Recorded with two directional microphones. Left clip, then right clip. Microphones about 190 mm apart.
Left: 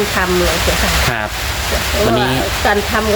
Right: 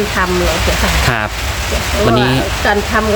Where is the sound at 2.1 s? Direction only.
20° right (ahead or behind).